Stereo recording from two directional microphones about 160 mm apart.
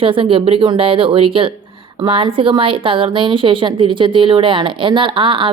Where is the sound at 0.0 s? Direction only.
35° right (ahead or behind).